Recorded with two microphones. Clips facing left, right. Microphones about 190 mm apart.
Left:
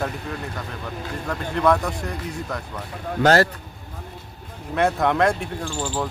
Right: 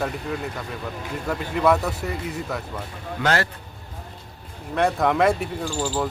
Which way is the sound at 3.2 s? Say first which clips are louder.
Left 6 dB; 40° left (ahead or behind).